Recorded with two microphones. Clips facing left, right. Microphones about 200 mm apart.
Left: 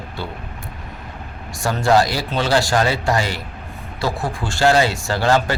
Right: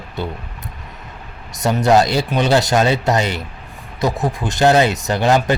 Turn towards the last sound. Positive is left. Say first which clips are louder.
# right 2 dB
turn(degrees=-20)  # may be behind; listen again after turning